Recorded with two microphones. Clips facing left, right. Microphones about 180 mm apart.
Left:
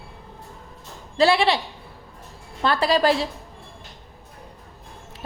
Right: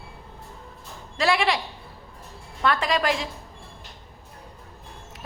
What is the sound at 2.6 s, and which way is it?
Speech, 30° left (ahead or behind).